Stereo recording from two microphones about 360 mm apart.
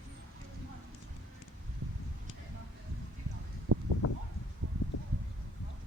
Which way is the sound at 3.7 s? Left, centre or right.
Right.